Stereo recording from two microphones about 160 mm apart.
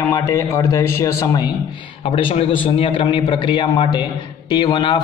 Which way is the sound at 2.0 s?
35° left (ahead or behind).